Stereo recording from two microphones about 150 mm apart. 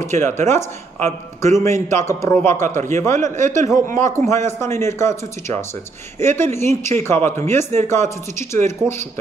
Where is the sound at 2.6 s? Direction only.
55° right (ahead or behind).